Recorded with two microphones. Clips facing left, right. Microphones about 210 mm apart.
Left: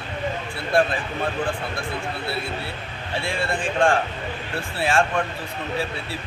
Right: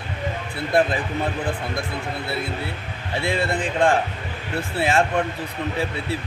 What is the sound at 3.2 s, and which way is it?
Speech, 20° right (ahead or behind).